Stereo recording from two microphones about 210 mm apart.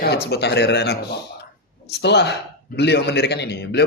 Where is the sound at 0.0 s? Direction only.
50° left (ahead or behind).